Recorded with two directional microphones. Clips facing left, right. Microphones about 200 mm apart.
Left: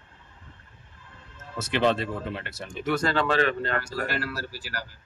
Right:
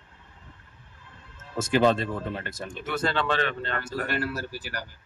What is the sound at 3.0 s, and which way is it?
Speech, 45° left (ahead or behind).